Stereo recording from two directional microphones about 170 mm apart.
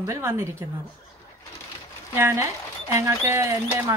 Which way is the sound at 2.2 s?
15° right (ahead or behind).